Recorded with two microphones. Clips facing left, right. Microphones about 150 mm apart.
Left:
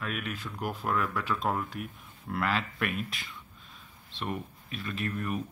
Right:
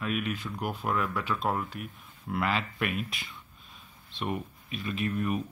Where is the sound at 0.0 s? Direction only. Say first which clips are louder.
Right 4 dB; 10° right (ahead or behind).